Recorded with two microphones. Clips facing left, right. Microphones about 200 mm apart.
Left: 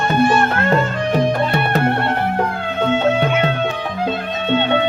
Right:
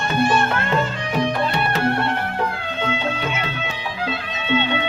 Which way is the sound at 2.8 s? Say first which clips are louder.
Left 9 dB; 50° left (ahead or behind).